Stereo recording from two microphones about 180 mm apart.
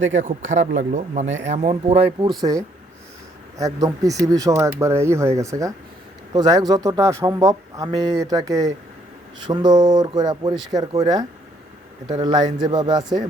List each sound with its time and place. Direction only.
0.2 s speech: 40° right (ahead or behind)
3.6 s speech: 20° right (ahead or behind)